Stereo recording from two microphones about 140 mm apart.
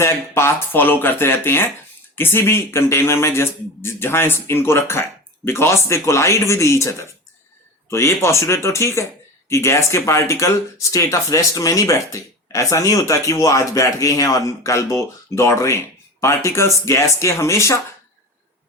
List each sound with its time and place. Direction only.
0.0 s a man's voice: 20° left (ahead or behind)